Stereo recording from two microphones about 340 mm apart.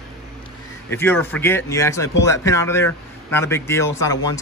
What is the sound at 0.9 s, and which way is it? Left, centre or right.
A man's voice, centre.